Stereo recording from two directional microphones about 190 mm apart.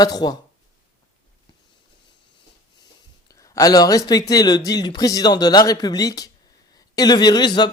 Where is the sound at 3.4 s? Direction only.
20° left (ahead or behind).